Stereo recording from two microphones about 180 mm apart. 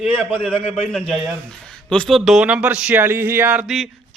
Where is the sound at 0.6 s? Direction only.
35° left (ahead or behind).